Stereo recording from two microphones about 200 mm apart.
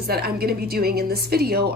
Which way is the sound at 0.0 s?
50° right (ahead or behind).